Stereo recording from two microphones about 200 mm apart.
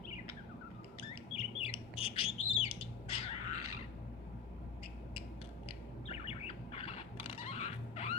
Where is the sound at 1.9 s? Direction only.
25° left (ahead or behind).